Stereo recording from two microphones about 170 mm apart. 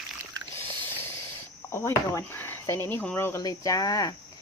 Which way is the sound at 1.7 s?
15° left (ahead or behind).